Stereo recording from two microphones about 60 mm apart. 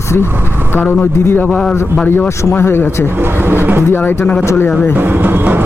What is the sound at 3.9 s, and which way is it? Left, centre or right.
Speech, left.